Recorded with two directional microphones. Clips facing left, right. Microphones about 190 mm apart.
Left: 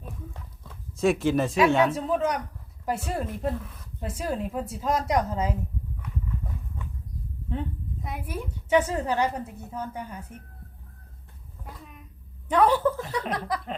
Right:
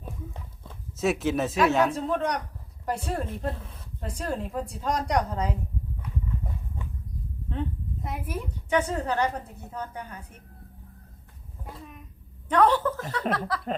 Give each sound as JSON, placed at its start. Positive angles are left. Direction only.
{"t": 0.9, "sound": "speech", "side_deg": 0}
{"t": 3.6, "sound": "speech", "side_deg": -30}
{"t": 4.0, "sound": "a woman's voice", "side_deg": 5}
{"t": 8.0, "sound": "a woman's voice", "side_deg": 0}
{"t": 12.5, "sound": "a woman's voice", "side_deg": 10}